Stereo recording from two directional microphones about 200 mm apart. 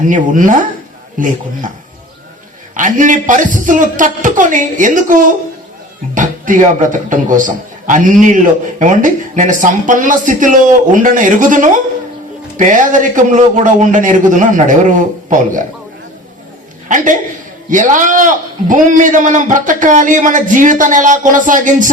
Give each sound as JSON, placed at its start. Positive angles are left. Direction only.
{"t": 0.0, "sound": "a man's voice", "side_deg": -40}
{"t": 2.7, "sound": "a man's voice", "side_deg": -40}
{"t": 16.9, "sound": "a man's voice", "side_deg": -40}